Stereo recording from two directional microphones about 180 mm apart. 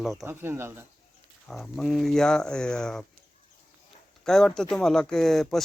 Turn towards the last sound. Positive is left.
turn(degrees=0)  # may be behind; listen again after turning